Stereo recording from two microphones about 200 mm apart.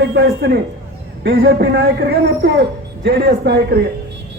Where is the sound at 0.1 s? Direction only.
50° right (ahead or behind).